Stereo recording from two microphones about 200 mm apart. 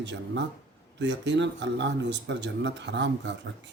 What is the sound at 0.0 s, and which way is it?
Speech, 60° right (ahead or behind).